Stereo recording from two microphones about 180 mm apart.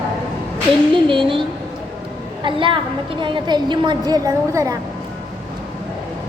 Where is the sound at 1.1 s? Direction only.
30° right (ahead or behind).